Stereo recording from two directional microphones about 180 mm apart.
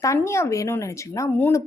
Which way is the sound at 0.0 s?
15° left (ahead or behind).